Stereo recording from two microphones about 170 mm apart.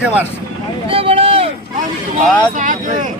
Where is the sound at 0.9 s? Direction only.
35° right (ahead or behind).